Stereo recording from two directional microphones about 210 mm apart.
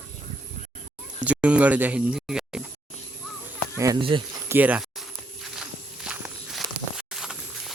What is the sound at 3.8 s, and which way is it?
Speech, 20° right (ahead or behind).